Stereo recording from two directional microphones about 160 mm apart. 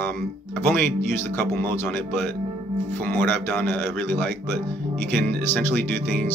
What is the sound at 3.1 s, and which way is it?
Speech, 10° left (ahead or behind).